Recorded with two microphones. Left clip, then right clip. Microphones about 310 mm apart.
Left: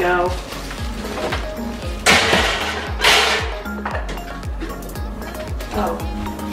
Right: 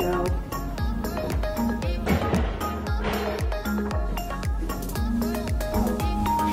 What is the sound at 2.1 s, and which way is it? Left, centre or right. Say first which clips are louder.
Music: left 14 dB; centre.